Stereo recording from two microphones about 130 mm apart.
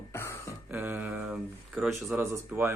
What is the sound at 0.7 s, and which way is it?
Speech, 15° right (ahead or behind).